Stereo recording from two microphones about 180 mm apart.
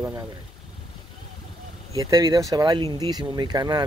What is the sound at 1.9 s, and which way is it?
Speech, 20° right (ahead or behind).